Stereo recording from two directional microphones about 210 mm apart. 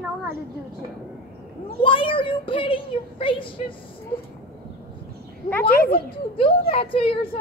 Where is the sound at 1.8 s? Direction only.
25° left (ahead or behind).